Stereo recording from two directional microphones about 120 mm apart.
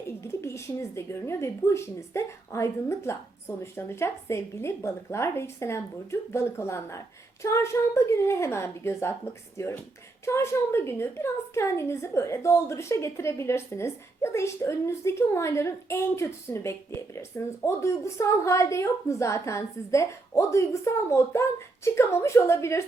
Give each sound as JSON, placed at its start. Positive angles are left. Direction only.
{"t": 0.2, "sound": "a woman's voice", "side_deg": 20}